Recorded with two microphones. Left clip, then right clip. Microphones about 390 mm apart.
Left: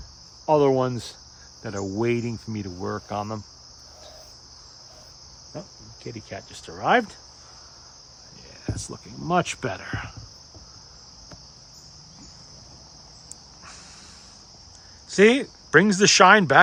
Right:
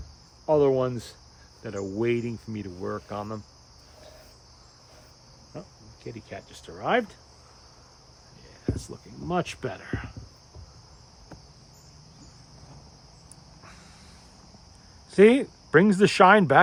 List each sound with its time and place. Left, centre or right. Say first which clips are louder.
0.4 s cricket: left 2 dB; left
6.1 s cricket: left 3 dB; left
8.7 s cricket: left 3 dB; left
15.1 s speech: even; centre